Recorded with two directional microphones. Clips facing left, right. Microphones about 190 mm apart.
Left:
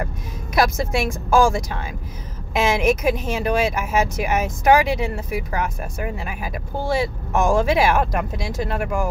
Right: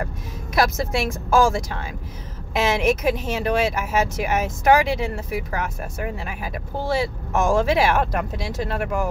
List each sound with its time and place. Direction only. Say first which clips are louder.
0.6 s speech: left 1 dB; 15° left (ahead or behind)